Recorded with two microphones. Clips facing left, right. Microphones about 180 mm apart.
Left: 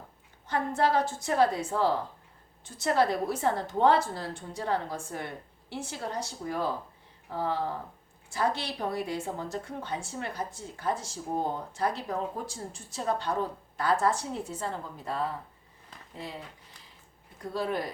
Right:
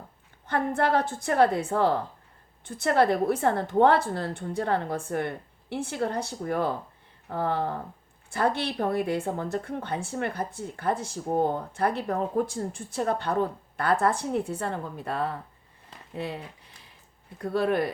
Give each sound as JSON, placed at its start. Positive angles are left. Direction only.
{"t": 0.4, "sound": "speech", "side_deg": -55}